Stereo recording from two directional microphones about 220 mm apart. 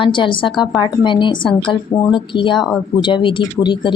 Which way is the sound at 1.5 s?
5° left (ahead or behind).